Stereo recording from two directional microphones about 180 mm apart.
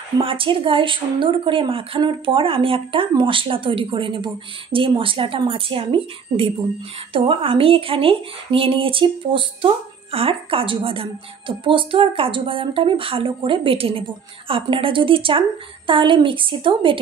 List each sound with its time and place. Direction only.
0.2 s a woman's voice: 30° right (ahead or behind)